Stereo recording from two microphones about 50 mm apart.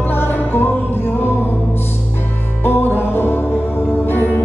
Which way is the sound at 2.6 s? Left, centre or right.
Left.